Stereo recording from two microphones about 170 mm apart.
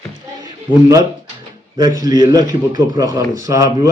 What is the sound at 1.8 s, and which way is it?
Speech, 20° right (ahead or behind).